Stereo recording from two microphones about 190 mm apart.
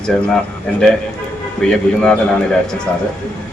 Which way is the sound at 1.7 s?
5° left (ahead or behind).